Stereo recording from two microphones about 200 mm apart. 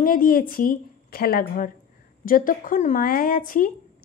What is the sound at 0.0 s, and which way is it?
A woman's voice, 45° left (ahead or behind).